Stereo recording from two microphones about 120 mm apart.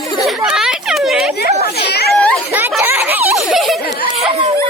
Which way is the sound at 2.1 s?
10° left (ahead or behind).